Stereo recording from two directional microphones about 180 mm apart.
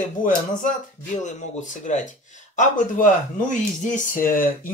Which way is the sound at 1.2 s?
45° left (ahead or behind).